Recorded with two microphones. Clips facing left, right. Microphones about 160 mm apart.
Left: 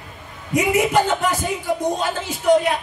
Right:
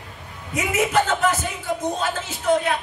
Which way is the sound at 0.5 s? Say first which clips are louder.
Left 4 dB; 15° left (ahead or behind).